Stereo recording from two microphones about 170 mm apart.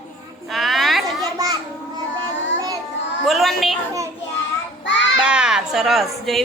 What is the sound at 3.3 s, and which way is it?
Speech, centre (ahead or behind).